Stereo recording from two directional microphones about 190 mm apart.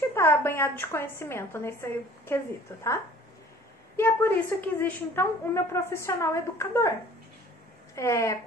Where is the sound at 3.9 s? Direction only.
10° left (ahead or behind).